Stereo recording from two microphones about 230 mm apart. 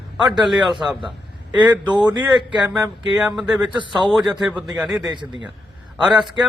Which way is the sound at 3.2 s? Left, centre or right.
Centre.